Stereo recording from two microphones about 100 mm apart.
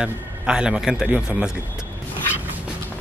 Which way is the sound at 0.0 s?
10° right (ahead or behind).